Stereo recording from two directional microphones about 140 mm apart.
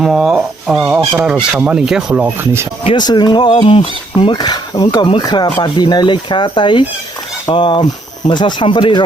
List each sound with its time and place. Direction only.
0.0 s speech: 5° right (ahead or behind)
2.8 s speech: 30° left (ahead or behind)